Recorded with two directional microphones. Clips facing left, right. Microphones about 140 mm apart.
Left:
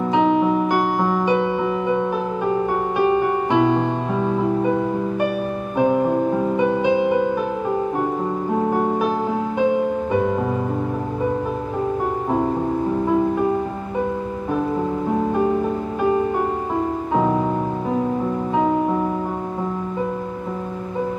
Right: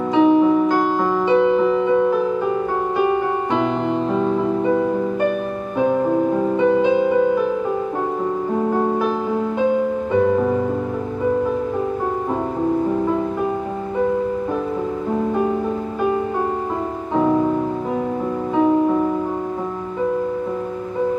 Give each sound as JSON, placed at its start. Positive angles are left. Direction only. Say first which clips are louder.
{"t": 0.1, "sound": "music", "louder": "right 4 dB", "side_deg": 15}
{"t": 6.5, "sound": "music", "louder": "right 4 dB", "side_deg": 15}